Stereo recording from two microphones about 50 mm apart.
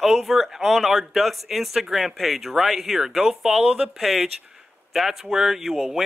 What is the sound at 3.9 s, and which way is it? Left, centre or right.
Speech, centre.